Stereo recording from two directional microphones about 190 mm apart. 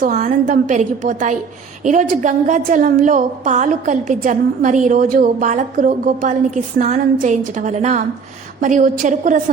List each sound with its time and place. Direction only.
0.0 s a woman's voice: 40° right (ahead or behind)